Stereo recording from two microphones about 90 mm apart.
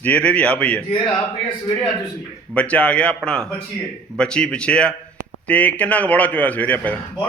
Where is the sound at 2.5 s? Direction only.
15° left (ahead or behind).